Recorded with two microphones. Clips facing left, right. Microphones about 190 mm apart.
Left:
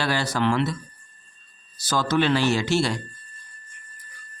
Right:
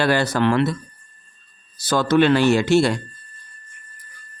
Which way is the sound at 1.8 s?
60° right (ahead or behind).